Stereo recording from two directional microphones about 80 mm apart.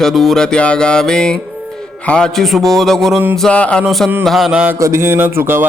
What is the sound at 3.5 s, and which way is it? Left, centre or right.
Mantra, centre.